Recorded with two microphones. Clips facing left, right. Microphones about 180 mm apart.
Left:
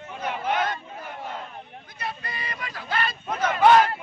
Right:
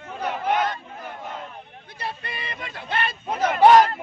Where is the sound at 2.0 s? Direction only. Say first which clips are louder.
Right 1 dB; 30° right (ahead or behind).